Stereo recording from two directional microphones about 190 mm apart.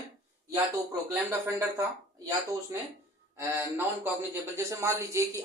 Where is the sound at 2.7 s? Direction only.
15° right (ahead or behind).